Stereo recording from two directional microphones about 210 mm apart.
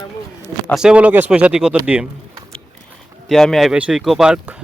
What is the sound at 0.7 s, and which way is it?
Speech, 5° right (ahead or behind).